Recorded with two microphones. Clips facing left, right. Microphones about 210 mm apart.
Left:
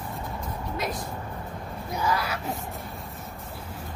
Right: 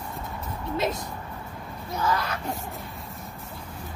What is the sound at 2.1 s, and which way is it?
Speech, 5° left (ahead or behind).